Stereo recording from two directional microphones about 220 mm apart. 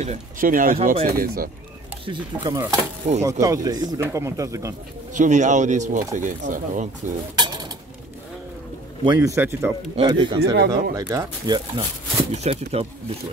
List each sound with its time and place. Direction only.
0.0 s speech: 35° right (ahead or behind)
2.0 s speech: 15° right (ahead or behind)
5.1 s speech: 35° right (ahead or behind)
7.3 s a sound: 20° right (ahead or behind)
9.0 s speech: 15° right (ahead or behind)
9.9 s speech: 20° right (ahead or behind)